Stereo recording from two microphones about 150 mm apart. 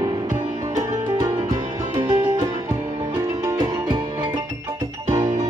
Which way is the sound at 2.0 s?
30° right (ahead or behind).